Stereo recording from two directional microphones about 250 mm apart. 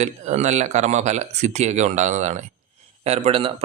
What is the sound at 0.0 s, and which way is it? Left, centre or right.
Speech, right.